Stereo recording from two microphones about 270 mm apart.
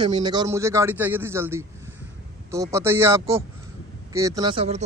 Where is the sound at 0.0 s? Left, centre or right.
Centre.